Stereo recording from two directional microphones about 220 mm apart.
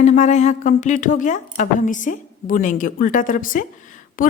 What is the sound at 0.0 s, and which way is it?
A woman's voice, 30° left (ahead or behind).